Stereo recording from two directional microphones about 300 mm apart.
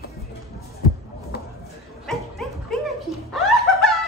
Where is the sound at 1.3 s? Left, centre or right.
Left.